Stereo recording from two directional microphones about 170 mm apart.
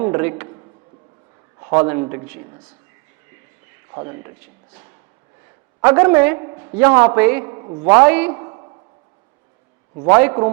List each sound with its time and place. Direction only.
0.0 s a man's voice: 15° right (ahead or behind)
1.7 s a man's voice: 10° right (ahead or behind)
3.9 s a woman's voice: 25° right (ahead or behind)
5.8 s a man's voice: 10° right (ahead or behind)
6.4 s a woman's voice: 25° right (ahead or behind)
6.7 s a man's voice: 10° right (ahead or behind)
7.4 s a man's voice: 25° right (ahead or behind)
7.9 s a man's voice: 10° right (ahead or behind)
8.3 s a sound: 25° right (ahead or behind)
10.1 s a man's voice: 10° right (ahead or behind)